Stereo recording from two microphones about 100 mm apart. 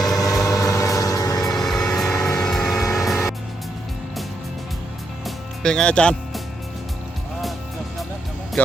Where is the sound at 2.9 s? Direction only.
Centre (ahead or behind).